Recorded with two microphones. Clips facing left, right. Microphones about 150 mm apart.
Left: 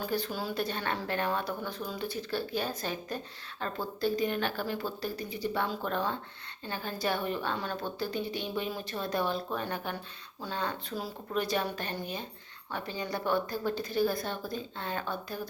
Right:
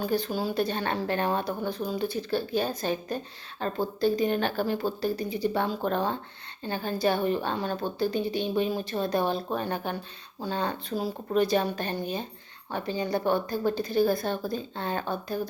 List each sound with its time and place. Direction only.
0.0 s a woman's voice: 25° right (ahead or behind)